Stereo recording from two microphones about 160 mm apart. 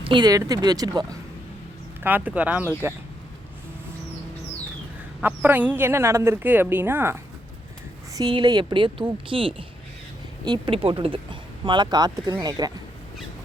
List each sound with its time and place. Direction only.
0.0 s speech: 30° right (ahead or behind)
2.0 s speech: 10° right (ahead or behind)
5.2 s speech: 10° right (ahead or behind)
8.1 s speech: 30° right (ahead or behind)